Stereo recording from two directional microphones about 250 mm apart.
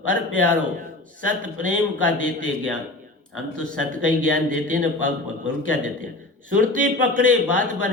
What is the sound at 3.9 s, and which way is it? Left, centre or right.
A man's voice, right.